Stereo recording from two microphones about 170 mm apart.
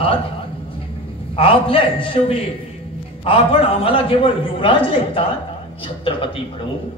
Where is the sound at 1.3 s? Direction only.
30° left (ahead or behind).